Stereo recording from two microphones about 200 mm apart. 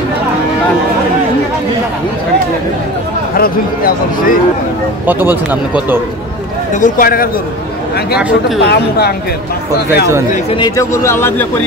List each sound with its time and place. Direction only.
3.3 s speech: 45° left (ahead or behind)
5.0 s speech: 10° right (ahead or behind)
6.7 s speech: 40° left (ahead or behind)
8.2 s speech: 5° right (ahead or behind)
8.6 s speech: 50° left (ahead or behind)
10.5 s speech: 20° left (ahead or behind)